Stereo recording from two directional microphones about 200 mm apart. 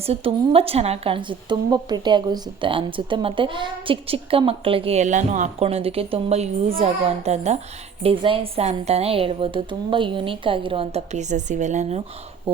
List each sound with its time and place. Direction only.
0.0 s a woman's voice: 30° right (ahead or behind)